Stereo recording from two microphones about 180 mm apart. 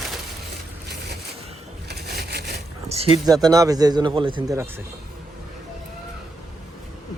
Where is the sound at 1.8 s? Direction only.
65° right (ahead or behind).